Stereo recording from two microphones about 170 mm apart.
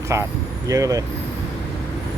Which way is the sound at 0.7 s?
20° right (ahead or behind).